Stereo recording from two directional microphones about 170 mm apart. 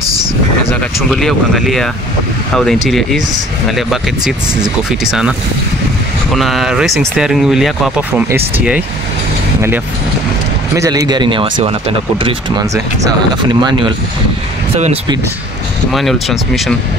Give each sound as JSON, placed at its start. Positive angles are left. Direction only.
{"t": 1.1, "sound": "speech", "side_deg": 0}
{"t": 6.3, "sound": "speech", "side_deg": 0}
{"t": 10.8, "sound": "speech", "side_deg": -20}
{"t": 15.9, "sound": "speech", "side_deg": 0}